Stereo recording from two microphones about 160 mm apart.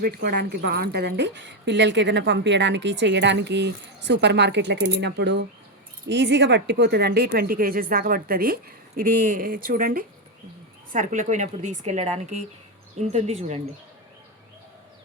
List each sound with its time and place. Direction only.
0.0 s a woman's voice: 75° right (ahead or behind)
9.0 s speech: 55° right (ahead or behind)
10.9 s speech: 50° right (ahead or behind)